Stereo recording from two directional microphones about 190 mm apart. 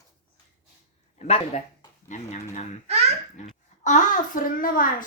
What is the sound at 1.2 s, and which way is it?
Speech, 35° left (ahead or behind).